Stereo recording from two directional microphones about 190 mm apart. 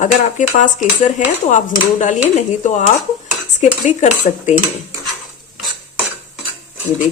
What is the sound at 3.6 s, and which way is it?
Speech, 40° left (ahead or behind).